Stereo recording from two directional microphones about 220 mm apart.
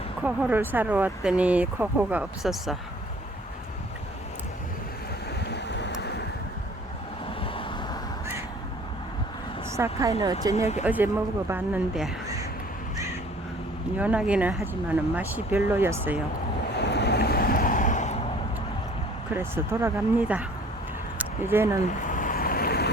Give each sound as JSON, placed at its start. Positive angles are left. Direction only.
{"t": 0.2, "sound": "speech", "side_deg": -10}
{"t": 5.5, "sound": "a sound", "side_deg": 50}
{"t": 7.4, "sound": "vehicle", "side_deg": 25}
{"t": 9.7, "sound": "speech", "side_deg": -15}
{"t": 14.0, "sound": "speech", "side_deg": -5}
{"t": 16.7, "sound": "waves", "side_deg": 50}
{"t": 19.3, "sound": "speech", "side_deg": -10}
{"t": 21.5, "sound": "speech", "side_deg": -10}
{"t": 21.8, "sound": "boat", "side_deg": 35}